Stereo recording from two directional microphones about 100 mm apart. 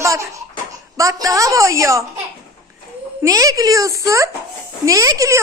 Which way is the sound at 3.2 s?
35° right (ahead or behind).